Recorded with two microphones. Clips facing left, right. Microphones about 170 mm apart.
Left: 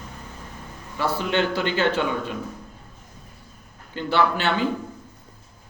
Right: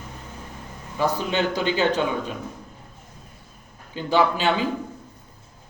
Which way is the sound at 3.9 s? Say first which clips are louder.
Right 1 dB; 15° right (ahead or behind).